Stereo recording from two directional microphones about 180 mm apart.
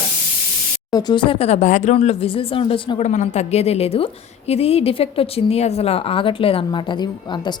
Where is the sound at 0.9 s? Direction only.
25° left (ahead or behind).